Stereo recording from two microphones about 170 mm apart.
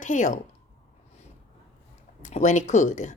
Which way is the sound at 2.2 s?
45° left (ahead or behind).